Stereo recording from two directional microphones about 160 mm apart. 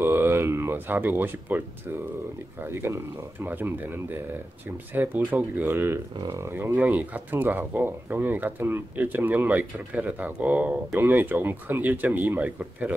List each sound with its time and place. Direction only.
0.0 s speech: 15° right (ahead or behind)